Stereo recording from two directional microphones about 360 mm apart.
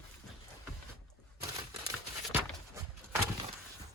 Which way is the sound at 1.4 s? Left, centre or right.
Centre.